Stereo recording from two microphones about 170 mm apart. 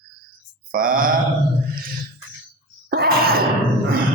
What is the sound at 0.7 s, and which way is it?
Speech, 55° right (ahead or behind).